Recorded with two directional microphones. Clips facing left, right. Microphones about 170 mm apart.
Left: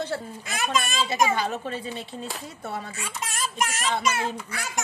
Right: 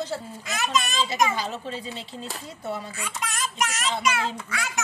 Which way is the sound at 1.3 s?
55° left (ahead or behind).